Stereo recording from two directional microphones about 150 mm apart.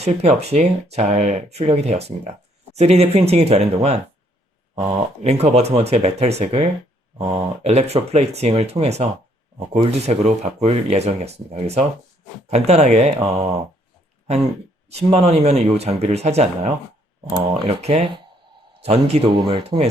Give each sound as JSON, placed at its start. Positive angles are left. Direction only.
{"t": 0.0, "sound": "speech", "side_deg": -45}
{"t": 4.7, "sound": "speech", "side_deg": -25}
{"t": 5.2, "sound": "speech", "side_deg": -45}
{"t": 14.8, "sound": "speech", "side_deg": -45}
{"t": 19.4, "sound": "speech", "side_deg": -30}